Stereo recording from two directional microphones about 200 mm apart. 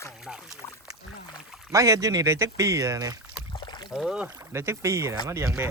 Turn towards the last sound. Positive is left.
turn(degrees=-15)  # may be behind; listen again after turning